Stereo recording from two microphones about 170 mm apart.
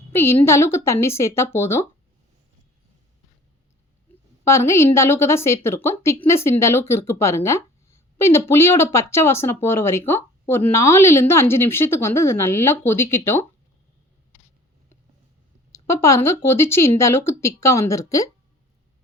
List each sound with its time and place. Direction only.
0.1 s a woman's voice: 15° left (ahead or behind)
4.4 s speech: 15° left (ahead or behind)
15.7 s speech: 15° left (ahead or behind)